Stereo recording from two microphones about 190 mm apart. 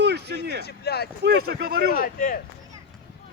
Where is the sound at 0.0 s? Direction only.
60° right (ahead or behind).